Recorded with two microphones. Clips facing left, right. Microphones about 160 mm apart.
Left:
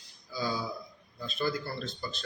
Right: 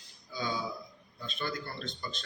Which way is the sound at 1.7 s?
5° left (ahead or behind).